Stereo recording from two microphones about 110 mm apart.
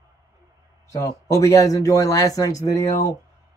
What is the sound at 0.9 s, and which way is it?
Speech, 30° left (ahead or behind).